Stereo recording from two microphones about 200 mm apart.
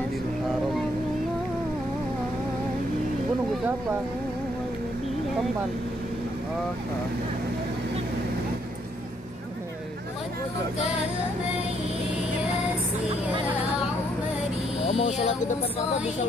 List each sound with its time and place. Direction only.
14.9 s speech: 35° left (ahead or behind)